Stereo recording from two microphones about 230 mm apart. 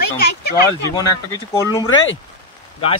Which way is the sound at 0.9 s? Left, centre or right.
Centre.